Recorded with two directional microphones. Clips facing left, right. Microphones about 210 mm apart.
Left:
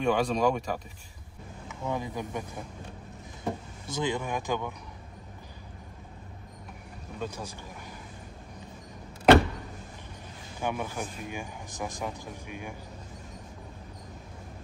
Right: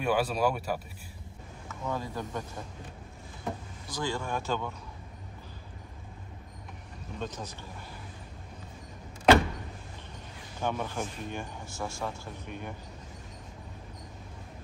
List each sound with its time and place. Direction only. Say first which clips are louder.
0.0 s speech: left 2 dB; 5° right (ahead or behind)
1.7 s speech: left 2 dB; 15° left (ahead or behind)
3.8 s speech: left 3 dB; 20° left (ahead or behind)
7.2 s speech: left 1 dB; 10° left (ahead or behind)
10.6 s speech: even; 10° left (ahead or behind)